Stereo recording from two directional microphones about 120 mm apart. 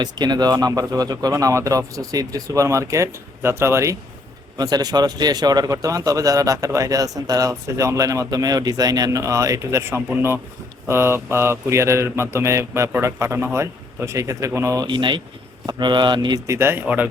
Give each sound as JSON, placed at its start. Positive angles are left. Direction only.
{"t": 0.0, "sound": "a man's voice", "side_deg": -35}
{"t": 4.5, "sound": "a man's voice", "side_deg": -35}
{"t": 14.8, "sound": "speech", "side_deg": -40}
{"t": 16.5, "sound": "a man's voice", "side_deg": -20}